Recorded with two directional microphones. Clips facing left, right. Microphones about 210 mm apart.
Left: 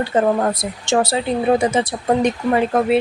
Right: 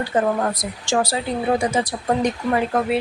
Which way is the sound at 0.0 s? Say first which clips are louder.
Left 3 dB; 25° left (ahead or behind).